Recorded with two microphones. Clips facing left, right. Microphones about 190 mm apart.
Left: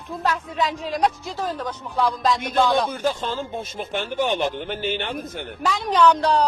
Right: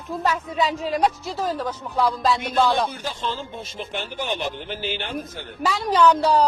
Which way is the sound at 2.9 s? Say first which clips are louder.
Left 5 dB; 50° left (ahead or behind).